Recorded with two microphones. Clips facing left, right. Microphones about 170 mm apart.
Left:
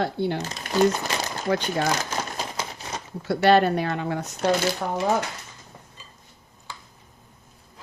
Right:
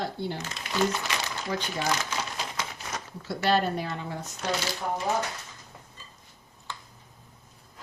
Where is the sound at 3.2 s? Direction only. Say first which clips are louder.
Left 7 dB; 65° left (ahead or behind).